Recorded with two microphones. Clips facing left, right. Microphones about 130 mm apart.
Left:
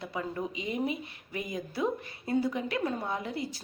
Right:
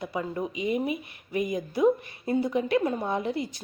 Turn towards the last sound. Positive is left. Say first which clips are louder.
# right 5 dB
turn(degrees=-20)  # may be behind; listen again after turning